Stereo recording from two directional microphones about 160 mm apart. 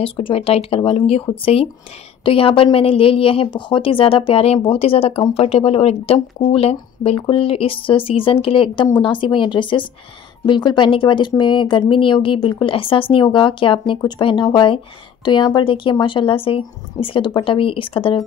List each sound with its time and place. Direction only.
0.0 s speech: 35° left (ahead or behind)